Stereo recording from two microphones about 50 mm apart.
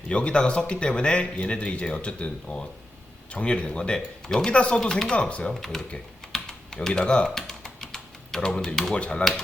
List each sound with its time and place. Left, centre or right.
0.1 s speech: left
4.8 s speech: centre
5.1 s speech: left
5.5 s speech: centre
6.3 s typing: centre
6.7 s typing: centre
8.7 s speech: centre
9.0 s speech: left